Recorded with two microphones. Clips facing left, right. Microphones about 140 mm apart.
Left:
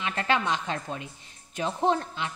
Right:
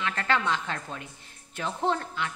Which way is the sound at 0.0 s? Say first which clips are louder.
Left 1 dB; 20° left (ahead or behind).